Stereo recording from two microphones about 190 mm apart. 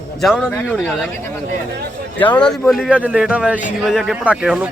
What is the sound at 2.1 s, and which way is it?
Speech, 10° left (ahead or behind).